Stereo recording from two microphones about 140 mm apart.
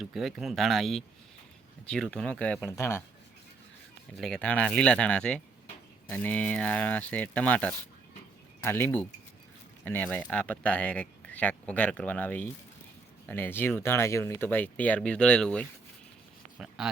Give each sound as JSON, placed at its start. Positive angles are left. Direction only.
{"t": 0.0, "sound": "speech", "side_deg": 0}
{"t": 2.6, "sound": "speech", "side_deg": 20}
{"t": 4.2, "sound": "speech", "side_deg": 5}